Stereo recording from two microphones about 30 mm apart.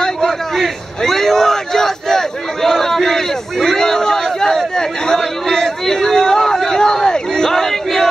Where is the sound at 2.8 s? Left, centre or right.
Centre.